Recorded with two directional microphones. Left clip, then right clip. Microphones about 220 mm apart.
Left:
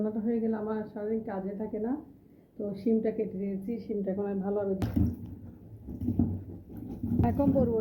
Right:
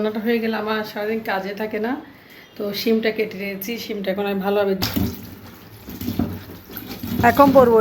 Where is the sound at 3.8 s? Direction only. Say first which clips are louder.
Right 10 dB; centre (ahead or behind).